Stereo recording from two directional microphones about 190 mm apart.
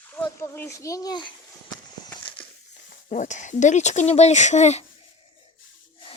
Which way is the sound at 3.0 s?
40° left (ahead or behind).